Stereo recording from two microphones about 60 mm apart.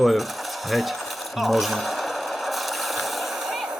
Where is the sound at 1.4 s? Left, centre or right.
Centre.